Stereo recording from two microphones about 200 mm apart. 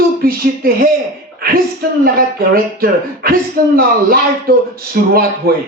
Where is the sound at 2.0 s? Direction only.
50° right (ahead or behind).